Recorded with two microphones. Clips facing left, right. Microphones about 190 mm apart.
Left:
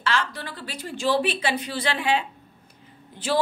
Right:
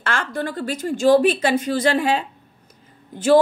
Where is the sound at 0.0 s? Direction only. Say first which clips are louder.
Right 3 dB; 50° right (ahead or behind).